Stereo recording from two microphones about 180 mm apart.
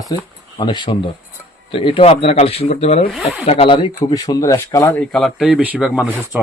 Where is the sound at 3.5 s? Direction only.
30° left (ahead or behind).